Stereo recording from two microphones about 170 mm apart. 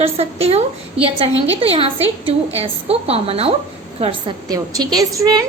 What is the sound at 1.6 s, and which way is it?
A woman's voice, 35° right (ahead or behind).